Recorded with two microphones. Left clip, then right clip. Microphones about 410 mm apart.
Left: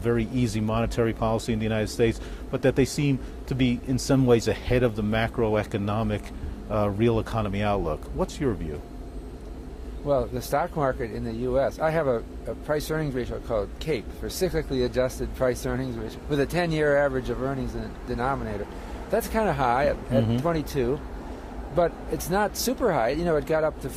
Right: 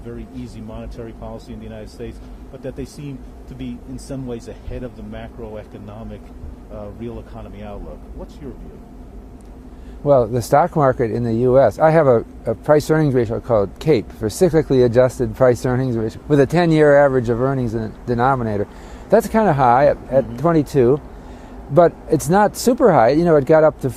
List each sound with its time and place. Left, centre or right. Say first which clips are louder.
0.1 s speech: left 8 dB; left
10.1 s speech: right 11 dB; right